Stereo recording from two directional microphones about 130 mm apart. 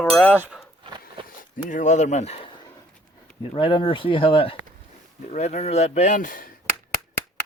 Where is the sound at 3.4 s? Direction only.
40° left (ahead or behind).